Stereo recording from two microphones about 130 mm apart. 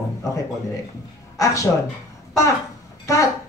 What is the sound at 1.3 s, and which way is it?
Speech, 25° left (ahead or behind).